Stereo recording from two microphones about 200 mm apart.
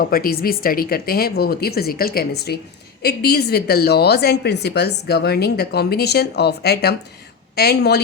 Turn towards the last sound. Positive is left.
turn(degrees=55)  # may be behind; listen again after turning